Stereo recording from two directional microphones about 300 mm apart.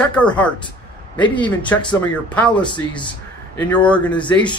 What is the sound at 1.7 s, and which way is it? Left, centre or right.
Speech, centre.